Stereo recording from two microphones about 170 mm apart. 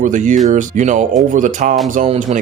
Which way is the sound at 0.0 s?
45° right (ahead or behind).